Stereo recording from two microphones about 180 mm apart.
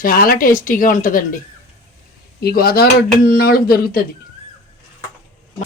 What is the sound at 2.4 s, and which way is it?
Speech, 60° left (ahead or behind).